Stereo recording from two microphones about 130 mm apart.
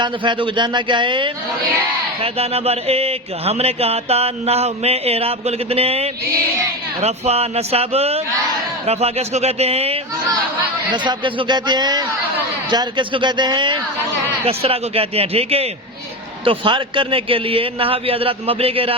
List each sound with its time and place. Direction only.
0.0 s a man's voice: 40° right (ahead or behind)
2.2 s mantra: 50° right (ahead or behind)
10.9 s a man's voice: 40° right (ahead or behind)
14.4 s mantra: 50° right (ahead or behind)